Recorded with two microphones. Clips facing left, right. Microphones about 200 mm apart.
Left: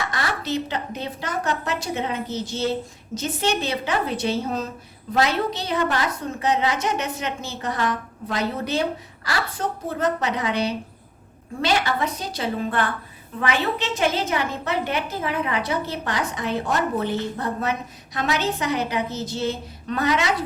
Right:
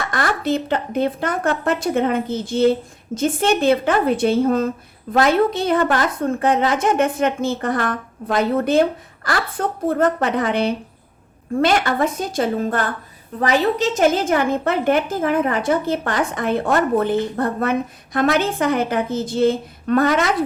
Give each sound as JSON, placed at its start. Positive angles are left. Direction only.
{"t": 0.1, "sound": "a woman's voice", "side_deg": -50}